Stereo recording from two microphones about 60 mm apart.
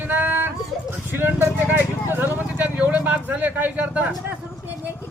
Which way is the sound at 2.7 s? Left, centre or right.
Right.